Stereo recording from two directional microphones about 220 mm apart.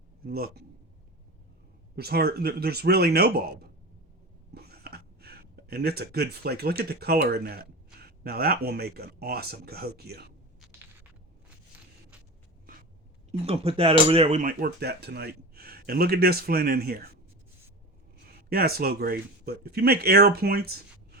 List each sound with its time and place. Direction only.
0.3 s speech: 45° right (ahead or behind)
2.0 s speech: 45° right (ahead or behind)
13.4 s speech: 25° right (ahead or behind); by 17.2 s 45° right (ahead or behind)
18.3 s speech: 45° right (ahead or behind)